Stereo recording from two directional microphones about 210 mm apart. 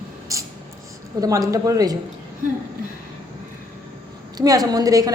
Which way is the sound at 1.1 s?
15° right (ahead or behind).